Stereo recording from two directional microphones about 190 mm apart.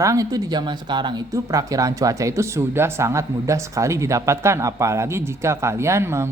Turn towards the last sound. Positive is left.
turn(degrees=-15)  # may be behind; listen again after turning